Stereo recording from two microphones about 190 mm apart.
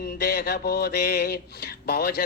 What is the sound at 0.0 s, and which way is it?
Speech, 60° left (ahead or behind).